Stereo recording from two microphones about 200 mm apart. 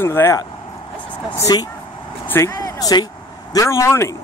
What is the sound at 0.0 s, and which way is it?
Speech, 10° left (ahead or behind).